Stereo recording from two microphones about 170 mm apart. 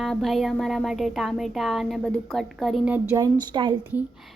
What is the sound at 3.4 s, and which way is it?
Speech, 25° right (ahead or behind).